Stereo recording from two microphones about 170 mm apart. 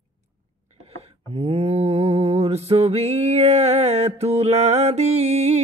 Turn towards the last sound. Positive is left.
turn(degrees=-40)  # may be behind; listen again after turning